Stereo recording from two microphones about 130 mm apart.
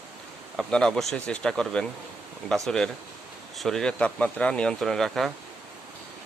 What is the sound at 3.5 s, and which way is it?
Speech, 5° left (ahead or behind).